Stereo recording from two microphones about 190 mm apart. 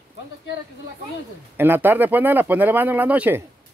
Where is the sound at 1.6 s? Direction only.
10° right (ahead or behind).